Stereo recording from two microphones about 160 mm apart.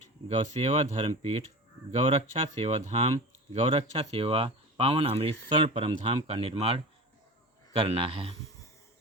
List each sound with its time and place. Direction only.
0.3 s speech: 40° right (ahead or behind)